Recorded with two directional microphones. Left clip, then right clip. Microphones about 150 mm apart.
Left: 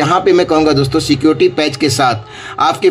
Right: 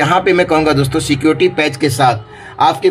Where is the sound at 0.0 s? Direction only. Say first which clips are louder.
Left 1 dB; 10° left (ahead or behind).